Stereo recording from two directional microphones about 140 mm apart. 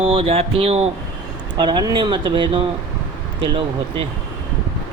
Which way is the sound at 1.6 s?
35° right (ahead or behind).